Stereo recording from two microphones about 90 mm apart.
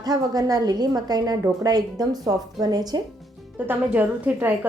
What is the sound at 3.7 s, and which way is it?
A woman's voice, 20° right (ahead or behind).